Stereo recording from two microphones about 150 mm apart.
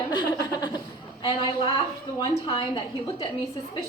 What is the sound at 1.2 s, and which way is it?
A woman's voice, 35° left (ahead or behind).